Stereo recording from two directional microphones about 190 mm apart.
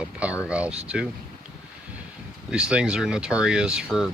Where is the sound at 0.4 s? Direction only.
5° right (ahead or behind).